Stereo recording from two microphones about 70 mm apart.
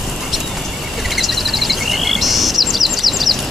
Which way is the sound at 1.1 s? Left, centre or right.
Centre.